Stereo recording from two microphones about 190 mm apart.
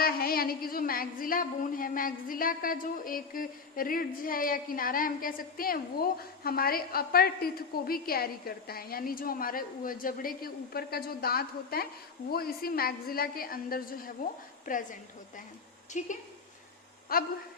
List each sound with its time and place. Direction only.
0.0 s a woman's voice: 50° left (ahead or behind)
17.1 s a woman's voice: 50° left (ahead or behind)